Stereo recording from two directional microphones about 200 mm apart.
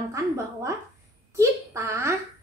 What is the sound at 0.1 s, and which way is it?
Speech, 15° right (ahead or behind).